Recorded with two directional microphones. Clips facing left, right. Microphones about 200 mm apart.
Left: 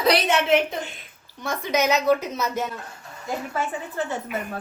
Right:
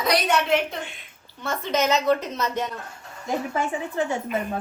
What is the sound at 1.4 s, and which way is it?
A woman's voice, 10° left (ahead or behind).